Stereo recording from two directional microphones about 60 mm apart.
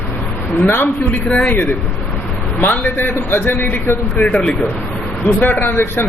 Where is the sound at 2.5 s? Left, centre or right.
Left.